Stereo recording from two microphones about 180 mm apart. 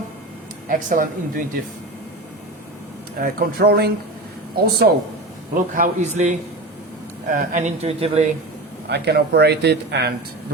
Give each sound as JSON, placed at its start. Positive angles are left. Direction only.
{"t": 0.9, "sound": "a woman's voice", "side_deg": -50}
{"t": 3.2, "sound": "speech", "side_deg": -60}
{"t": 5.7, "sound": "a woman's voice", "side_deg": -40}
{"t": 8.9, "sound": "speech", "side_deg": -65}